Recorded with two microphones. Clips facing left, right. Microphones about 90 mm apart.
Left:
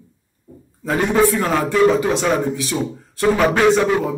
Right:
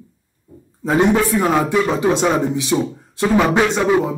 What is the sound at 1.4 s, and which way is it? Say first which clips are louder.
A man's voice: left 1 dB; 15° right (ahead or behind).